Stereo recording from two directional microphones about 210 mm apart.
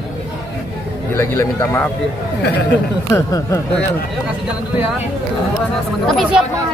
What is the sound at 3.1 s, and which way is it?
Speech, 15° left (ahead or behind).